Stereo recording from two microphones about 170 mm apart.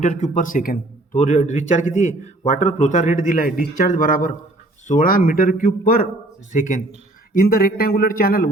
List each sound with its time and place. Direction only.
0.0 s a man's voice: 45° left (ahead or behind)
7.3 s speech: 60° left (ahead or behind)